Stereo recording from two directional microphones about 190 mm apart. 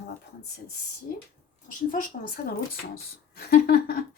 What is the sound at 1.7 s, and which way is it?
Speech, 45° left (ahead or behind).